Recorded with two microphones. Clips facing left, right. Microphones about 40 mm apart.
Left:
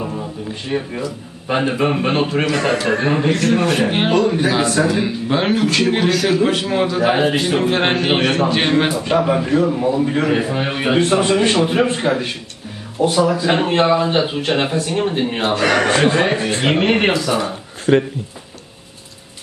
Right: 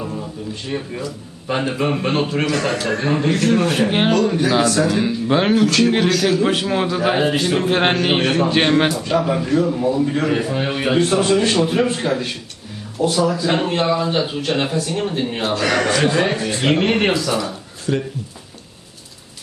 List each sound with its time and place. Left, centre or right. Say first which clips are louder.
0.0 s a sound: left 2 dB; centre
0.7 s a man's voice: left 4 dB; centre
3.3 s a man's voice: left 1 dB; centre
4.1 s a man's voice: left 1 dB; centre
8.9 s a man's voice: left 2 dB; centre
15.9 s speech: left 2 dB; left
16.2 s a man's voice: left 2 dB; centre
17.4 s a sound: left 4 dB; left